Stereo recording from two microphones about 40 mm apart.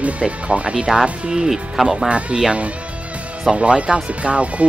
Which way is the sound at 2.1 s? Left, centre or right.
Right.